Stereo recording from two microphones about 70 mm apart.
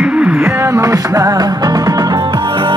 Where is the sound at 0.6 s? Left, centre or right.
Right.